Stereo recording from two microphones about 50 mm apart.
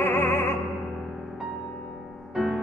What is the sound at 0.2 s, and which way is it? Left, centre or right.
Music, left.